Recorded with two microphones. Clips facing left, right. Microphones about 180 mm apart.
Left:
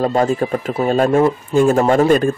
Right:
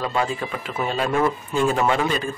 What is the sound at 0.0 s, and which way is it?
Speech, 45° left (ahead or behind).